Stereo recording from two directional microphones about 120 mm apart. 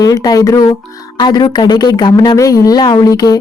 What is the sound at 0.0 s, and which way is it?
Speech, 30° left (ahead or behind).